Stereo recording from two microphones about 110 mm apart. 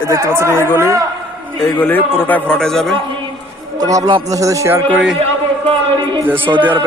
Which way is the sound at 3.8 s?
35° right (ahead or behind).